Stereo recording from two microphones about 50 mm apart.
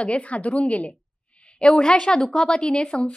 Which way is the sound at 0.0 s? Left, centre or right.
Left.